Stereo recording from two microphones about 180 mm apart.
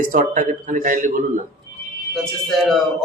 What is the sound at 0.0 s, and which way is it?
Speech, 50° right (ahead or behind).